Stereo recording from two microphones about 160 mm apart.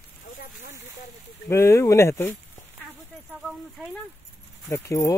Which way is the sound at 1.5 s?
15° left (ahead or behind).